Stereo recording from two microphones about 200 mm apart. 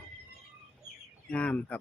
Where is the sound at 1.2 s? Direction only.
5° left (ahead or behind).